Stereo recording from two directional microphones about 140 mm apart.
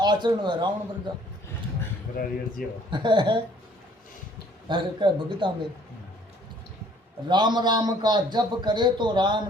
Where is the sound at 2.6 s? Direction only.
90° left.